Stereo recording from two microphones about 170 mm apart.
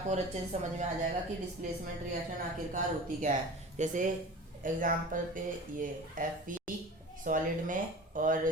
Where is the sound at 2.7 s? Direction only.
50° right (ahead or behind).